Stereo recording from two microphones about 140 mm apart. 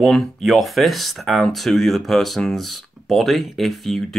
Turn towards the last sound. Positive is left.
turn(degrees=0)  # may be behind; listen again after turning